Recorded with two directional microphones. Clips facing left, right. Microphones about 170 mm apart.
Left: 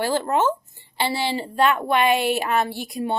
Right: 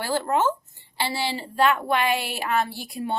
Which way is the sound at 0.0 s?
20° left (ahead or behind).